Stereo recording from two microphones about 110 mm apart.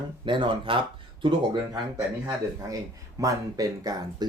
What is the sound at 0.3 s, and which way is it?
Speech, 50° right (ahead or behind).